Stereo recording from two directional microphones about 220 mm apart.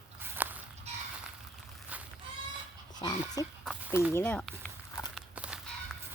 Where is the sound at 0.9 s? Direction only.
30° right (ahead or behind).